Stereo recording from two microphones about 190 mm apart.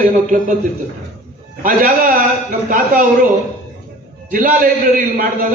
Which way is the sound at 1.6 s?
45° right (ahead or behind).